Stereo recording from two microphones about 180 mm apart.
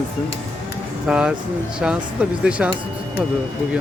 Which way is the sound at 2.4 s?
5° right (ahead or behind).